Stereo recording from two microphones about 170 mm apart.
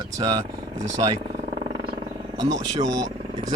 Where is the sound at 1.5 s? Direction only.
25° right (ahead or behind).